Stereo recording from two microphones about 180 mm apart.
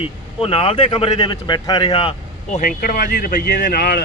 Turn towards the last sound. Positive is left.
turn(degrees=60)  # may be behind; listen again after turning